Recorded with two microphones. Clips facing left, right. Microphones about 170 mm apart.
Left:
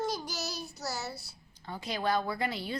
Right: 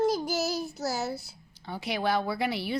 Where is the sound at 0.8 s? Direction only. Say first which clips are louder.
Right 4 dB; 50° right (ahead or behind).